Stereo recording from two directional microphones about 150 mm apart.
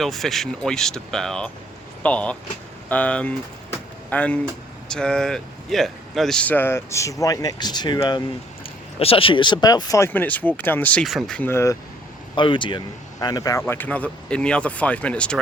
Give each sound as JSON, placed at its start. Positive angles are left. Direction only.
{"t": 0.0, "sound": "speech", "side_deg": 0}
{"t": 2.9, "sound": "a sound", "side_deg": 10}
{"t": 4.9, "sound": "speech", "side_deg": 5}
{"t": 9.0, "sound": "speech", "side_deg": 40}
{"t": 10.1, "sound": "speech", "side_deg": 10}
{"t": 12.3, "sound": "speech", "side_deg": 30}